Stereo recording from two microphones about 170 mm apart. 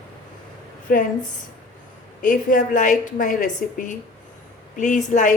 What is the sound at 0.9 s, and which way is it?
Speech, 55° left (ahead or behind).